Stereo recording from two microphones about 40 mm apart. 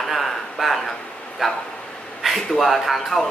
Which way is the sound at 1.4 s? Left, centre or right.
Centre.